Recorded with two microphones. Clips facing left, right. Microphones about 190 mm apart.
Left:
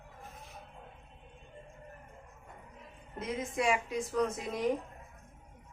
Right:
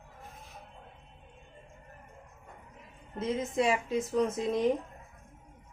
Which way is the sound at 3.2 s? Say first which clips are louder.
Right 4 dB; 25° right (ahead or behind).